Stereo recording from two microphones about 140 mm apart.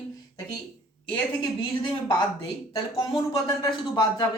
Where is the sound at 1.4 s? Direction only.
35° left (ahead or behind).